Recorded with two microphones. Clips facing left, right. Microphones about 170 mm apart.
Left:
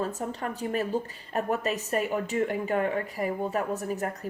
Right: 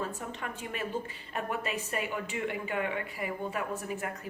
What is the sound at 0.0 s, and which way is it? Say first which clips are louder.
A woman's voice: left 6 dB; 40° left (ahead or behind).